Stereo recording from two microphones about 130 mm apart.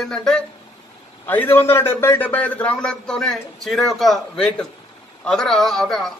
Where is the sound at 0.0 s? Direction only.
5° left (ahead or behind).